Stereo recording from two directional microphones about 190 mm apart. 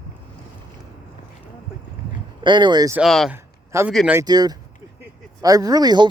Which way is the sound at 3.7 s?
15° right (ahead or behind).